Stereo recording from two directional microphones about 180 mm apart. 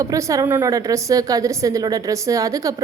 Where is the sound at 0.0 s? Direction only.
15° right (ahead or behind).